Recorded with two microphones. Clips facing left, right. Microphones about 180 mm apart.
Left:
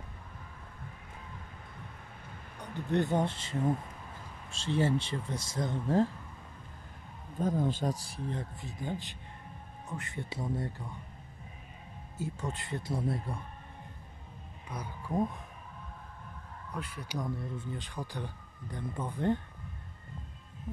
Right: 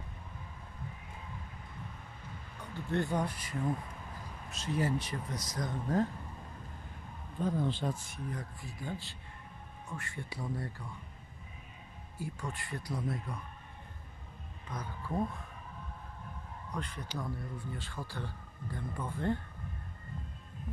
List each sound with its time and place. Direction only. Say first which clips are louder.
2.6 s speech: left 4 dB; 20° left (ahead or behind)
7.3 s speech: left 2 dB; 45° left (ahead or behind); by 10.9 s 20° left (ahead or behind)
12.2 s speech: left 3 dB; 20° left (ahead or behind)
14.7 s speech: left 2 dB; 15° left (ahead or behind)
16.7 s speech: left 2 dB; 10° left (ahead or behind)